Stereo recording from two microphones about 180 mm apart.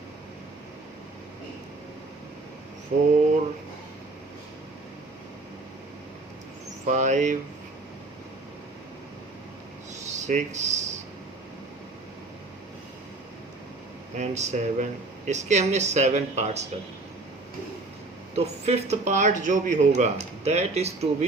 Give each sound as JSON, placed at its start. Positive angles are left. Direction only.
{"t": 2.9, "sound": "speech", "side_deg": -40}
{"t": 6.8, "sound": "speech", "side_deg": -40}
{"t": 9.9, "sound": "rub", "side_deg": -40}
{"t": 14.2, "sound": "speech", "side_deg": -40}
{"t": 18.3, "sound": "speech", "side_deg": -35}